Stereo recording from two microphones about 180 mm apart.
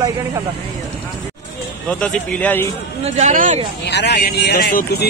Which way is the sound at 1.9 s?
5° left (ahead or behind).